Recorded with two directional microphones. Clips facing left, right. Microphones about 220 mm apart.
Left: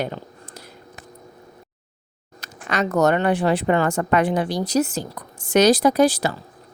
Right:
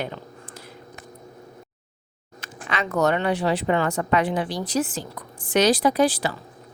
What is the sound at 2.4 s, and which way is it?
Speech, 40° left (ahead or behind).